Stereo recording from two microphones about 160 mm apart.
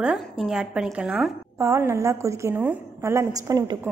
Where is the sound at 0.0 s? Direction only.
5° right (ahead or behind).